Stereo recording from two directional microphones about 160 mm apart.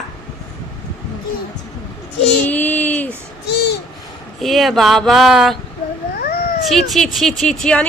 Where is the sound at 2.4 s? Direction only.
10° left (ahead or behind).